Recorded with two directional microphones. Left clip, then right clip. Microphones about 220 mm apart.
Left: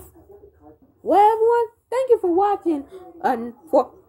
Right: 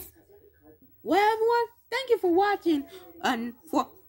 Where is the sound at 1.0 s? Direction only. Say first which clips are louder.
Left 8 dB; 40° right (ahead or behind).